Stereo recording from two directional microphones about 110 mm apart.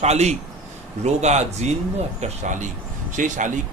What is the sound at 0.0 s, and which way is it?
Speech, 90° right.